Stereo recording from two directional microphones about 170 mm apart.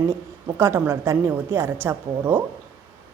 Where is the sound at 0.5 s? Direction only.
15° right (ahead or behind).